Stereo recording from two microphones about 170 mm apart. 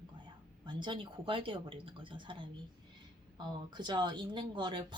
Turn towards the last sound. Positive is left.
turn(degrees=-25)  # may be behind; listen again after turning